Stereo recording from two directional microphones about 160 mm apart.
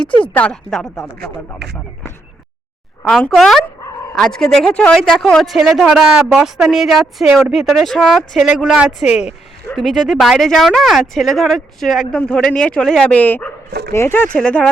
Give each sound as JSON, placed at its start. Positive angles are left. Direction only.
{"t": 0.2, "sound": "a woman's voice", "side_deg": 10}
{"t": 1.6, "sound": "speech", "side_deg": -90}
{"t": 3.0, "sound": "a woman's voice", "side_deg": 5}
{"t": 13.7, "sound": "speech", "side_deg": -90}
{"t": 13.9, "sound": "a woman's voice", "side_deg": 15}